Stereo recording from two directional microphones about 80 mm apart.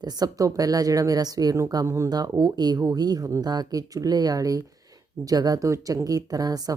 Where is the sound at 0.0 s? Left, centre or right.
Right.